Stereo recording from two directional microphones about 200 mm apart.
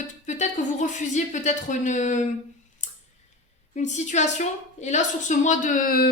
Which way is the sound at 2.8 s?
35° left (ahead or behind).